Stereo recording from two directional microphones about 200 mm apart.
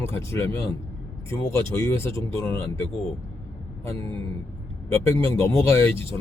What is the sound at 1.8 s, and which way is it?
Speech, 15° left (ahead or behind).